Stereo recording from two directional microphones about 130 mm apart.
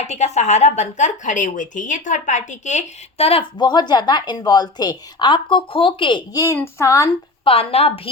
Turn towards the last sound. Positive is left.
turn(degrees=50)  # may be behind; listen again after turning